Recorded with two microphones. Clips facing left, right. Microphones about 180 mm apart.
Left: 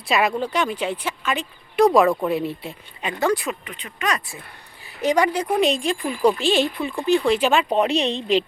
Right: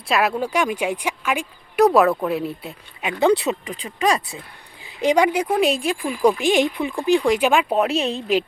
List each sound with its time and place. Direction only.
0.1 s speech: 5° right (ahead or behind)
3.7 s speech: 30° right (ahead or behind)
4.9 s speech: 15° right (ahead or behind)